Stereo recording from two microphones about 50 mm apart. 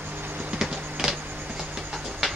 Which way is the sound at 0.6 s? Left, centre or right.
Centre.